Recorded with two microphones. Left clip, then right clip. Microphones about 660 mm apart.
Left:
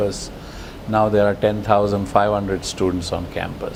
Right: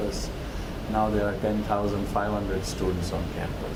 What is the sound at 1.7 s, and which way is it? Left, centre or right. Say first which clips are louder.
Speech: left 13 dB; left.